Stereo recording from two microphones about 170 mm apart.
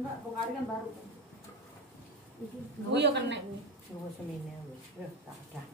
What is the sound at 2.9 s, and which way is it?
Speech, 90° right.